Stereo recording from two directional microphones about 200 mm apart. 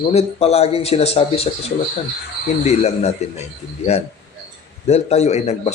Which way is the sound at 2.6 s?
30° left (ahead or behind).